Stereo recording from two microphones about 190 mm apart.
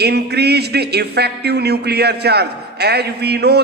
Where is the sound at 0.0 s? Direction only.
60° right (ahead or behind).